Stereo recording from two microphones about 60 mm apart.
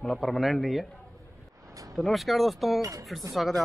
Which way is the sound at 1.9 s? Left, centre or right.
Centre.